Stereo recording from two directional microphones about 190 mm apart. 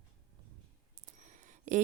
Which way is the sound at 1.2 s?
40° right (ahead or behind).